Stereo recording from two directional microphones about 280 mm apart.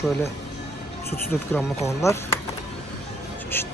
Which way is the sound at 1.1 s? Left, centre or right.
Centre.